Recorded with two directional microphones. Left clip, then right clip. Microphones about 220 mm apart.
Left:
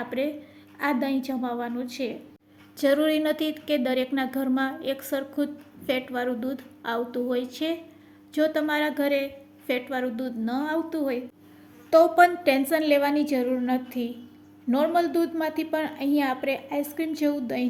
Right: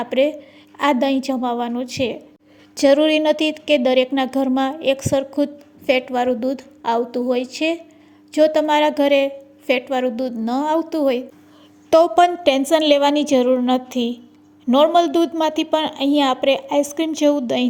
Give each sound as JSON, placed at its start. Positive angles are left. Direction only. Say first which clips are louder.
{"t": 0.0, "sound": "a woman's voice", "louder": "right 11 dB", "side_deg": -30}